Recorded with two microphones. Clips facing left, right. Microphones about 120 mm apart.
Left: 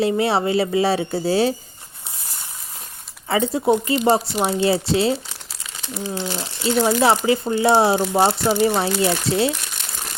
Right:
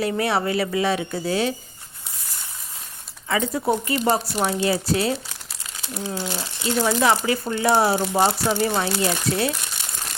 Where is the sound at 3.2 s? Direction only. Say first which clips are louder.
Left 4 dB; 30° left (ahead or behind).